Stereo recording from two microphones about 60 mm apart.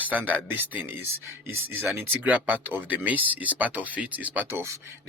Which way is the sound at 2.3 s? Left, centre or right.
Right.